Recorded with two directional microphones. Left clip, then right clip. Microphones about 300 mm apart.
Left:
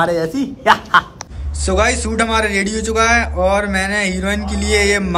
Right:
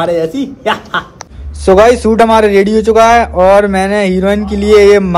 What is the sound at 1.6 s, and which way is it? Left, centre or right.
A man's voice, centre.